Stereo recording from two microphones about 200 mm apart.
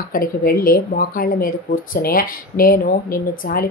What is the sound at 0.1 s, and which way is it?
Speech, 45° left (ahead or behind).